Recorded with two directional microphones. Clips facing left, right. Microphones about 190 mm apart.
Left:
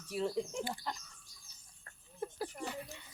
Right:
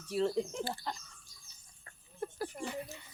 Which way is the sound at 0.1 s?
10° left (ahead or behind).